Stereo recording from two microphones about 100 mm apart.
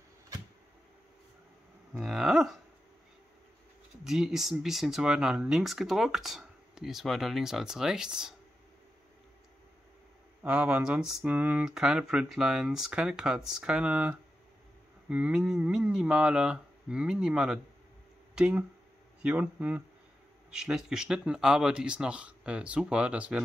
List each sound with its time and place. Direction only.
2.0 s speech: 5° right (ahead or behind)
4.0 s speech: 5° right (ahead or behind)
10.4 s speech: 15° right (ahead or behind)